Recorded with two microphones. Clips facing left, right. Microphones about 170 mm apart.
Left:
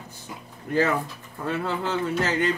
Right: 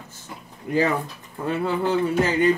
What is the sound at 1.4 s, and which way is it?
A man's voice, 15° right (ahead or behind).